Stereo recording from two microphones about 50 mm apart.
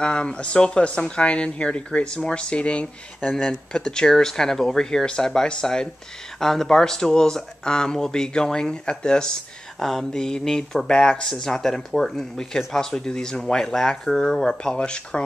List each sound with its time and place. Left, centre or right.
0.0 s speech: centre
9.8 s speech: centre